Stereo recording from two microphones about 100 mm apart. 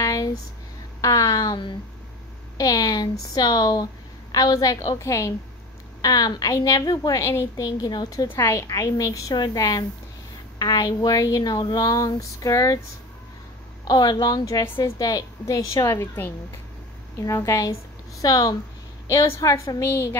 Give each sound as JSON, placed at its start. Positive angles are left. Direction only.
{"t": 0.0, "sound": "a sound", "side_deg": 35}
{"t": 1.0, "sound": "a woman's voice", "side_deg": 35}
{"t": 4.7, "sound": "a woman's voice", "side_deg": 30}
{"t": 5.9, "sound": "a woman's voice", "side_deg": 40}
{"t": 8.3, "sound": "a woman's voice", "side_deg": 30}
{"t": 13.8, "sound": "a woman's voice", "side_deg": 45}
{"t": 19.0, "sound": "a woman's voice", "side_deg": 30}